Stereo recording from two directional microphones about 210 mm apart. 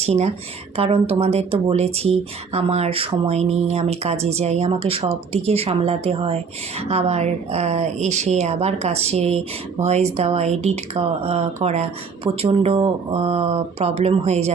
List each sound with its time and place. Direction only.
0.0 s speech: 30° right (ahead or behind)